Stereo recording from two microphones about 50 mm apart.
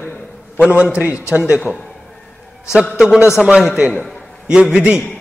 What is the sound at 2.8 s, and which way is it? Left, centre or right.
A man's voice, centre.